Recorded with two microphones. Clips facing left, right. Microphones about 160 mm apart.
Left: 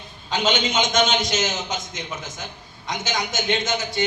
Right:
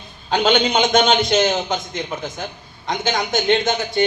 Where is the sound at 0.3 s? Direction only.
60° right (ahead or behind).